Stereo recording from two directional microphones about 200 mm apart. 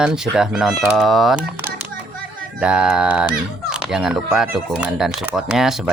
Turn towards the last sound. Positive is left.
turn(degrees=0)  # may be behind; listen again after turning